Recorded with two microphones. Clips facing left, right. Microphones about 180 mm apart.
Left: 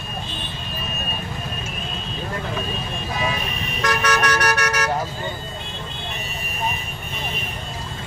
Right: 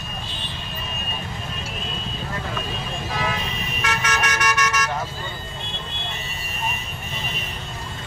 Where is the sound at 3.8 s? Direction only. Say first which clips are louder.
Left 5 dB; 65° left (ahead or behind).